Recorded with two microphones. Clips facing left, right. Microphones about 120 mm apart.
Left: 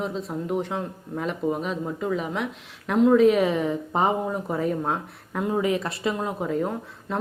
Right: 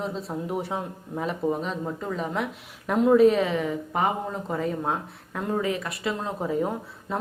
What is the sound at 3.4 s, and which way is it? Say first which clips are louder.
Speech: left 2 dB; 15° left (ahead or behind).